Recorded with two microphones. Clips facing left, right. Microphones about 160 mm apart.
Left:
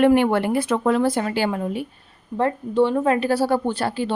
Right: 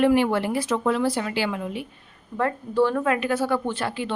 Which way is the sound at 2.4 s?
25° left (ahead or behind).